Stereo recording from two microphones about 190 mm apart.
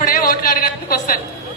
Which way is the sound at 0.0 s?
50° left (ahead or behind).